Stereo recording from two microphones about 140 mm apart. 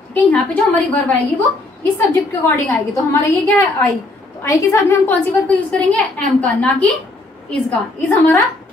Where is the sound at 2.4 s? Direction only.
20° left (ahead or behind).